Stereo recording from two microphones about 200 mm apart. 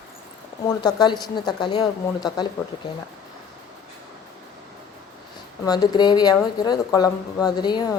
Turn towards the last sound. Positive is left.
turn(degrees=20)  # may be behind; listen again after turning